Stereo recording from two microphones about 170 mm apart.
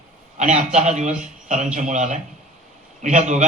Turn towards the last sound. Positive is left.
turn(degrees=-45)  # may be behind; listen again after turning